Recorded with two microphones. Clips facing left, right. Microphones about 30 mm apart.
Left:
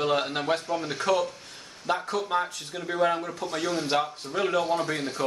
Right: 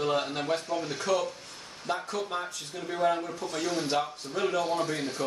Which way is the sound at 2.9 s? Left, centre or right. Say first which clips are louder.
Left 2 dB; left.